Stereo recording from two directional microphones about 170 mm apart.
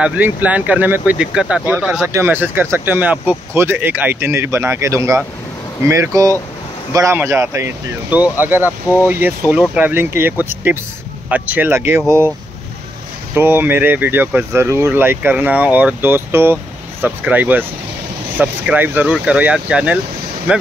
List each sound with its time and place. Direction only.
0.0 s speech: 10° right (ahead or behind)
13.3 s speech: 10° right (ahead or behind)